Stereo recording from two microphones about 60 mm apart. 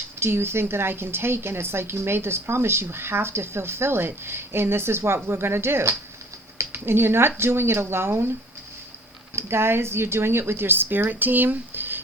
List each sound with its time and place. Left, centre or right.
0.2 s a woman's voice: right
9.3 s a woman's voice: right